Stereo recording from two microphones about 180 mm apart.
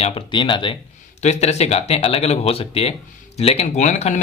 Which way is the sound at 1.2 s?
40° left (ahead or behind).